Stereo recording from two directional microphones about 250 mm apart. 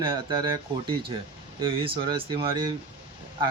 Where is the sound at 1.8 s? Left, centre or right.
Centre.